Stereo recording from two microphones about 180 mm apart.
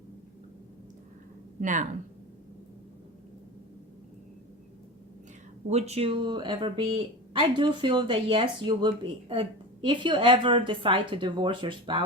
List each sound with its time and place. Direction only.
1.6 s speech: 45° right (ahead or behind)
5.6 s a woman's voice: 35° right (ahead or behind)